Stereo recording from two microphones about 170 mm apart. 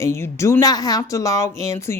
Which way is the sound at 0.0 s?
15° left (ahead or behind).